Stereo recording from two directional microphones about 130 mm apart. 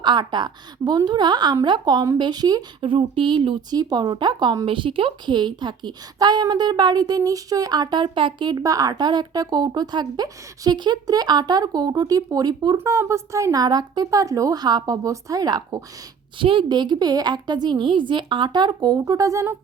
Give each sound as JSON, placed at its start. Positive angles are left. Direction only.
{"t": 0.0, "sound": "a woman's voice", "side_deg": -35}
{"t": 16.4, "sound": "speech", "side_deg": -40}